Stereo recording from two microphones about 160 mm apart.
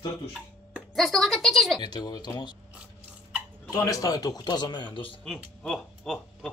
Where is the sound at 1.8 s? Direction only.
25° left (ahead or behind).